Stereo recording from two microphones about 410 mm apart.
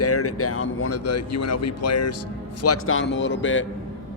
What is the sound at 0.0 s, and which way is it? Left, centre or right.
A man's voice, left.